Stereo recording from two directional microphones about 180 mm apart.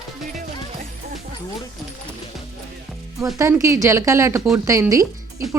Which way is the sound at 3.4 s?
15° right (ahead or behind).